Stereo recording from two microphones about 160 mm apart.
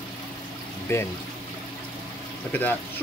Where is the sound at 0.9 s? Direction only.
15° left (ahead or behind).